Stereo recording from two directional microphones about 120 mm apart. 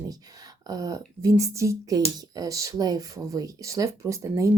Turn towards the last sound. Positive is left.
turn(degrees=-25)  # may be behind; listen again after turning